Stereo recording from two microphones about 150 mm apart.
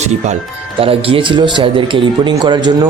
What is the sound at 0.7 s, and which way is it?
A man's voice, 40° right (ahead or behind).